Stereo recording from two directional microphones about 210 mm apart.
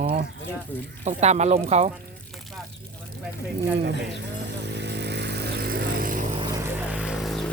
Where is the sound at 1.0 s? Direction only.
30° right (ahead or behind).